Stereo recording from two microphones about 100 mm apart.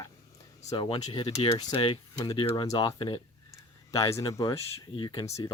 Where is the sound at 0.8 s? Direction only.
65° left (ahead or behind).